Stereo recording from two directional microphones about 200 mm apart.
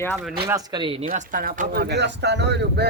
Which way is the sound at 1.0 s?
45° right (ahead or behind).